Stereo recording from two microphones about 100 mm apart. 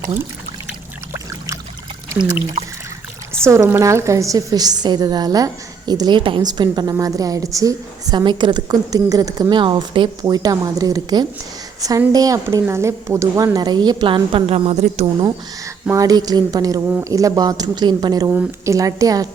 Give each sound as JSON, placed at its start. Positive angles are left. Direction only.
{"t": 3.4, "sound": "a woman's voice", "side_deg": -30}
{"t": 6.4, "sound": "a woman's voice", "side_deg": -45}
{"t": 8.1, "sound": "a woman's voice", "side_deg": -50}
{"t": 15.9, "sound": "a woman's voice", "side_deg": -35}
{"t": 18.6, "sound": "a woman's voice", "side_deg": -30}